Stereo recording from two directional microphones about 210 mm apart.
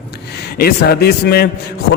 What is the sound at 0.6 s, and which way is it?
Speech, 50° left (ahead or behind).